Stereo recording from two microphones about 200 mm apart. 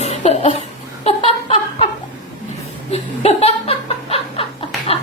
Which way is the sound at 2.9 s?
30° left (ahead or behind).